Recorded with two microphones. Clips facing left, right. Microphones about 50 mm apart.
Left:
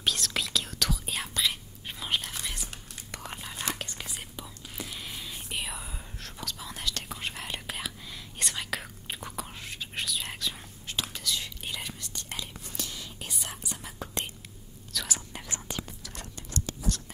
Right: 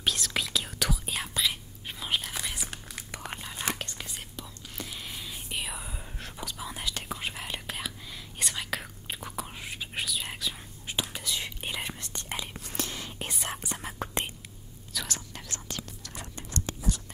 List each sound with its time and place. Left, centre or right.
0.0 s whispering: centre
10.9 s whispering: centre
12.7 s whispering: right
15.0 s whispering: centre
15.4 s whispering: centre